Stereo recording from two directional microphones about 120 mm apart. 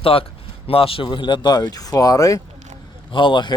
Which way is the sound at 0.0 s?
50° left (ahead or behind).